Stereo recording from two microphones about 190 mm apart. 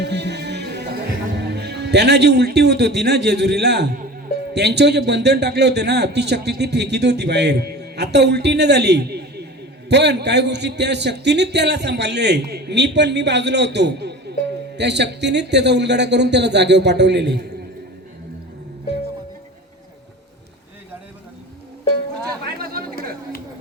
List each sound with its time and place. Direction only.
0.0 s music: 65° right (ahead or behind)
1.4 s a man's voice: 60° right (ahead or behind)
22.4 s a sound: 50° right (ahead or behind)